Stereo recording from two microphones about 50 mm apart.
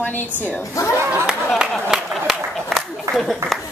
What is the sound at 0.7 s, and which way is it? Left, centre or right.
Speech, left.